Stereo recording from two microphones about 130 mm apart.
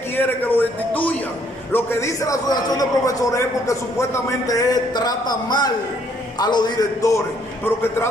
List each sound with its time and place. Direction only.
0.1 s a man's voice: 15° left (ahead or behind)